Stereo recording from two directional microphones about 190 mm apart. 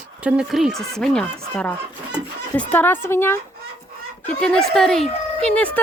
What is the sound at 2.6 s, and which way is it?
Speech, 10° left (ahead or behind).